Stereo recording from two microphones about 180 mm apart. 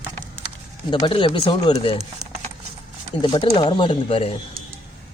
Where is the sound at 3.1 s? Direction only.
25° left (ahead or behind).